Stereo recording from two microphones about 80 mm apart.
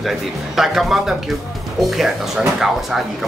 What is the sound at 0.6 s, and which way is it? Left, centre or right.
Speech, centre.